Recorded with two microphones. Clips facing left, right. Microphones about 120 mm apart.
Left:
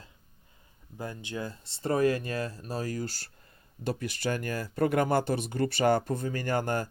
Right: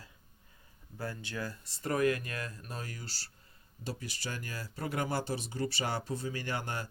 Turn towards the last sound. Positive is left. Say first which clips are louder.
# left 8 dB
turn(degrees=45)  # may be behind; listen again after turning